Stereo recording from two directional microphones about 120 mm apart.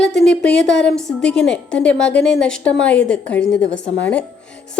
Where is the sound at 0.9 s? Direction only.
5° left (ahead or behind).